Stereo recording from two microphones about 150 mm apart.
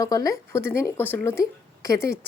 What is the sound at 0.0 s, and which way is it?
A woman's voice, 25° left (ahead or behind).